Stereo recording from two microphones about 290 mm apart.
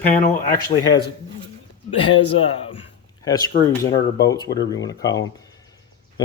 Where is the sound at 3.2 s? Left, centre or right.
Centre.